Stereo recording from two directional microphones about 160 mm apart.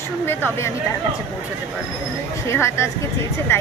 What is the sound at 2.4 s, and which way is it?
Speech, 15° left (ahead or behind).